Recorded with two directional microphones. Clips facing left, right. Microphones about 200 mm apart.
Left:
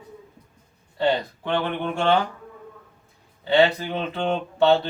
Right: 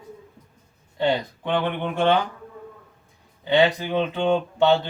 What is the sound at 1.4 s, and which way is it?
Speech, 15° right (ahead or behind).